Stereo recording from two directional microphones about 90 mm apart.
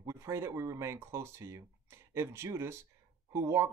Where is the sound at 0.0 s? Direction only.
35° right (ahead or behind).